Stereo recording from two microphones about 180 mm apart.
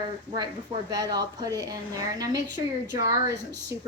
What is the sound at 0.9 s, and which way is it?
A woman's voice, 20° right (ahead or behind).